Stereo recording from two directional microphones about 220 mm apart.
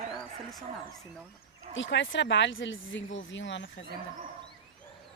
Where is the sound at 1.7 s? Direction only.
55° left (ahead or behind).